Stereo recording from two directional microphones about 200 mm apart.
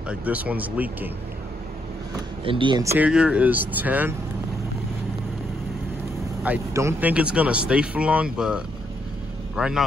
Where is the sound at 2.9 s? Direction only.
5° right (ahead or behind).